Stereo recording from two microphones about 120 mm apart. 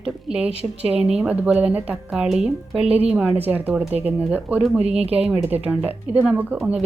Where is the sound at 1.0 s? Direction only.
5° right (ahead or behind).